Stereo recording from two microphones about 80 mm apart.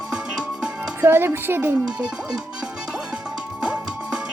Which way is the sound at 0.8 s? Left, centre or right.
Right.